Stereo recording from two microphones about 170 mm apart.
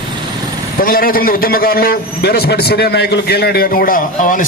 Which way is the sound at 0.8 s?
60° left (ahead or behind).